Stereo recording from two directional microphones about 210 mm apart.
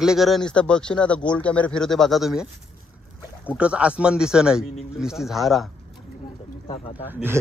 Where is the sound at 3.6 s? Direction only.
5° right (ahead or behind).